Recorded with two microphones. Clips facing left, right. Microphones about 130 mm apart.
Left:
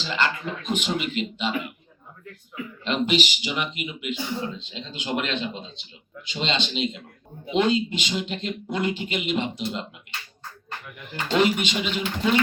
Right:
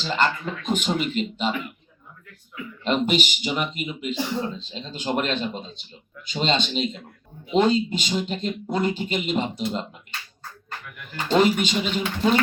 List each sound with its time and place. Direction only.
0.0 s speech: 45° right (ahead or behind)
2.8 s speech: 45° right (ahead or behind)
11.3 s speech: 40° right (ahead or behind)